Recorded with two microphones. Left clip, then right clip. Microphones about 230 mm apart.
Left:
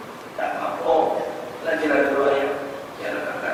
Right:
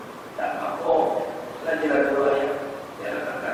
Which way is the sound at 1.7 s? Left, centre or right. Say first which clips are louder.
Left 2 dB; centre.